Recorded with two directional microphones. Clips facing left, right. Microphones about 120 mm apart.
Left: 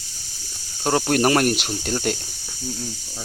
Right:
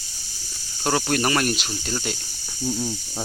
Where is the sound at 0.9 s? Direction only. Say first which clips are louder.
Left 5 dB; 45° left (ahead or behind).